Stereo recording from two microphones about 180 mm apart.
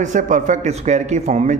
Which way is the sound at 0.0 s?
45° right (ahead or behind).